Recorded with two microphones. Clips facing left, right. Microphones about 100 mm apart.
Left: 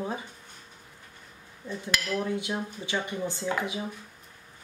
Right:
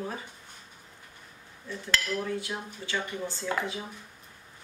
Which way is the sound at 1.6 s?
15° left (ahead or behind).